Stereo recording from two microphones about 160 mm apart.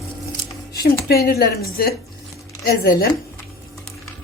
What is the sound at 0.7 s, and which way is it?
Speech, 75° left (ahead or behind).